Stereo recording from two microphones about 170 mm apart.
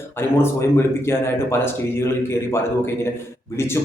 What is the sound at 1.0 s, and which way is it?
A man's voice, 15° left (ahead or behind).